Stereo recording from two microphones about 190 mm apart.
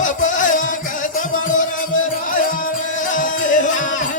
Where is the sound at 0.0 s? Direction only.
45° left (ahead or behind).